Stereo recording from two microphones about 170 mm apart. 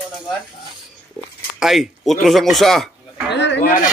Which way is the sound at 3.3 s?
90° left.